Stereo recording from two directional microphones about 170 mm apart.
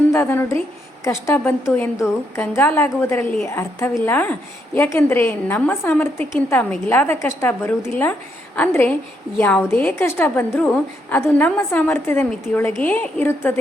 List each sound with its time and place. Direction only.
0.1 s a woman's voice: 15° left (ahead or behind)